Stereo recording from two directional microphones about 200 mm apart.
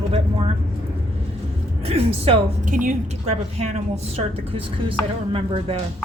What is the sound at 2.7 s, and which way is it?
A woman's voice, 40° right (ahead or behind).